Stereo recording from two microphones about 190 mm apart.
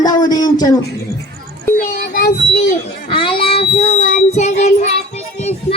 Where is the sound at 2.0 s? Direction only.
50° left (ahead or behind).